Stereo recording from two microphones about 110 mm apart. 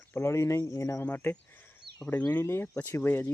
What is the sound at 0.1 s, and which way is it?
Speech, 25° left (ahead or behind).